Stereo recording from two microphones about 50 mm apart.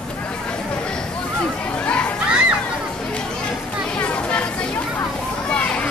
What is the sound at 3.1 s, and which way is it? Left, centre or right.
Chatter, centre.